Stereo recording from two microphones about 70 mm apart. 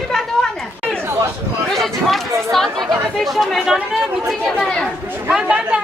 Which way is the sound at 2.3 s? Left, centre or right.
Right.